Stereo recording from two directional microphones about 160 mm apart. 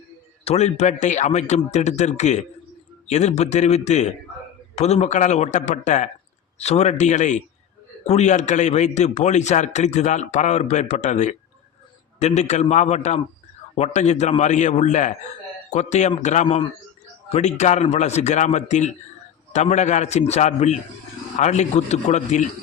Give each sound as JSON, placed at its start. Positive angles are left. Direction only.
{"t": 0.4, "sound": "a man's voice", "side_deg": 40}